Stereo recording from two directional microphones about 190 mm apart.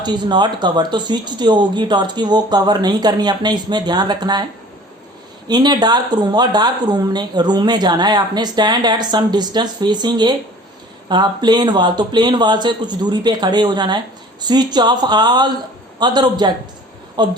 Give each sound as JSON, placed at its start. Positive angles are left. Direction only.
{"t": 0.0, "sound": "a woman's voice", "side_deg": -25}
{"t": 5.5, "sound": "a woman's voice", "side_deg": -20}